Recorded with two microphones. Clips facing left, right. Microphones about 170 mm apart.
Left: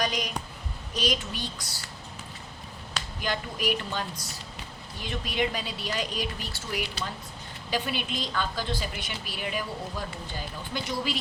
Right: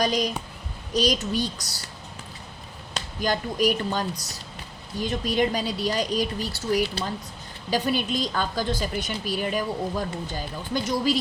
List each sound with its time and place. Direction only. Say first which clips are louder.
0.0 s speech: right 6 dB; 35° right (ahead or behind)
3.2 s speech: right 8 dB; 40° right (ahead or behind)
10.8 s speech: right 7 dB; 40° right (ahead or behind)